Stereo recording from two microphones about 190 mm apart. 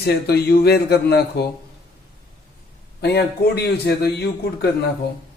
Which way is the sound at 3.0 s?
60° left (ahead or behind).